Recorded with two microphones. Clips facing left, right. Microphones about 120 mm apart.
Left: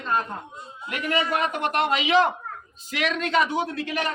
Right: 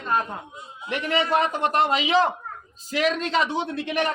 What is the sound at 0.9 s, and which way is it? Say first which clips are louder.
A man's voice: right 2 dB; 30° right (ahead or behind).